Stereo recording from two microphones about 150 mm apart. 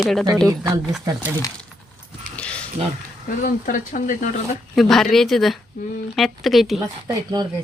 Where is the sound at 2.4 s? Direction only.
10° left (ahead or behind).